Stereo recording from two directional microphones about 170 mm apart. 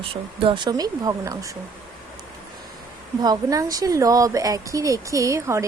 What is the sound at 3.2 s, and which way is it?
A woman's voice, 20° right (ahead or behind).